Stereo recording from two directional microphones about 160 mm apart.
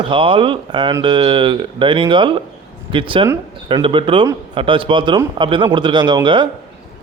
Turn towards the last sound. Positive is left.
turn(degrees=-30)  # may be behind; listen again after turning